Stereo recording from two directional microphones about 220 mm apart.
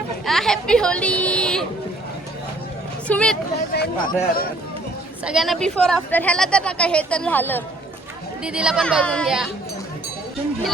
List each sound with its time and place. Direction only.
0.3 s a sound: centre (ahead or behind)
3.1 s speech: 5° left (ahead or behind)
3.7 s a man's voice: 40° left (ahead or behind)
5.2 s a woman's voice: centre (ahead or behind)
8.4 s a woman's voice: 5° right (ahead or behind)